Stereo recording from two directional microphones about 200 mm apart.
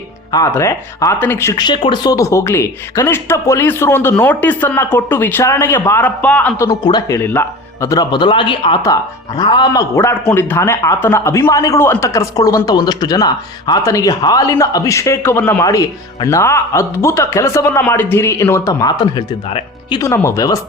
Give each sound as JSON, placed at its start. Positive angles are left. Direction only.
{"t": 0.3, "sound": "speech", "side_deg": 15}
{"t": 6.7, "sound": "speech", "side_deg": 20}